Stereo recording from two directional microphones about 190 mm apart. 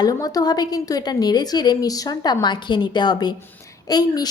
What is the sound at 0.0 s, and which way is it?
A woman's voice, 20° left (ahead or behind).